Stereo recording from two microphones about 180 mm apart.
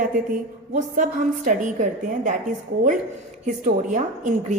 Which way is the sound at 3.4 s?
45° right (ahead or behind).